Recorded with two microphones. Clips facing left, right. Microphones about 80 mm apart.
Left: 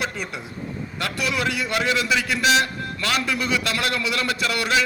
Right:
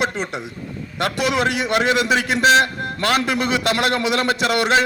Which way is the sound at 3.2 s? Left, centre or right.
Right.